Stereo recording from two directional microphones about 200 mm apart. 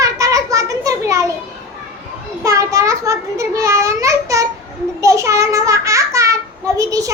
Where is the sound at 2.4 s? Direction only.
15° right (ahead or behind).